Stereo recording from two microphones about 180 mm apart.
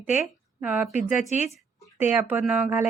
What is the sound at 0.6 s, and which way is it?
Speech, 5° right (ahead or behind).